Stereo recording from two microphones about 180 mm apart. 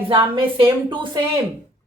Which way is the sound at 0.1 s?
30° right (ahead or behind).